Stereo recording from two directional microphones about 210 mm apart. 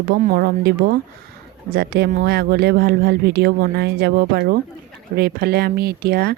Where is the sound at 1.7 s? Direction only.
50° right (ahead or behind).